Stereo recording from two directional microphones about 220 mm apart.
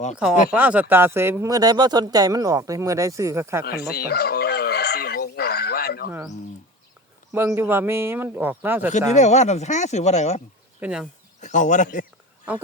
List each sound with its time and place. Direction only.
0.5 s speech: 5° right (ahead or behind)
3.6 s fowl: 45° left (ahead or behind)
7.3 s speech: 10° right (ahead or behind)
8.9 s speech: 30° left (ahead or behind)
10.8 s speech: 5° right (ahead or behind)
11.3 s speech: 35° left (ahead or behind)